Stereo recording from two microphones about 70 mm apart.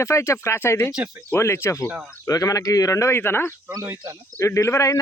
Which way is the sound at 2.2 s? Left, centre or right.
Left.